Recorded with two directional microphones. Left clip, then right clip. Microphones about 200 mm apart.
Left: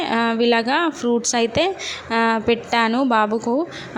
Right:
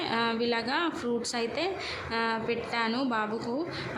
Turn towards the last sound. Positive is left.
turn(degrees=40)  # may be behind; listen again after turning